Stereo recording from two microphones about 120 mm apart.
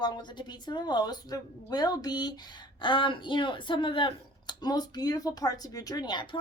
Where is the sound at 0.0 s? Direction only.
40° left (ahead or behind).